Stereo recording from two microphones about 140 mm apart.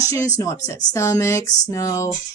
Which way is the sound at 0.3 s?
20° left (ahead or behind).